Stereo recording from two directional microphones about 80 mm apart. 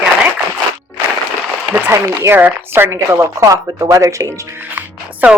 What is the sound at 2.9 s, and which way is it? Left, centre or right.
Speech, right.